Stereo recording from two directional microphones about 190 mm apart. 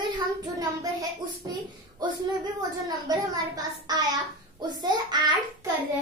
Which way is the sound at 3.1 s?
20° right (ahead or behind).